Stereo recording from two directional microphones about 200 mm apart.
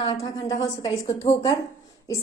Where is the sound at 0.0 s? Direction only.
25° left (ahead or behind).